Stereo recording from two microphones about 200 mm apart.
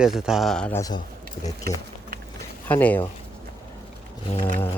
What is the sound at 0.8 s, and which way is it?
Speech, 20° left (ahead or behind).